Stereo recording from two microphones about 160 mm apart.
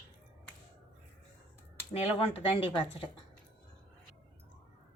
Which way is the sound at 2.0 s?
40° left (ahead or behind).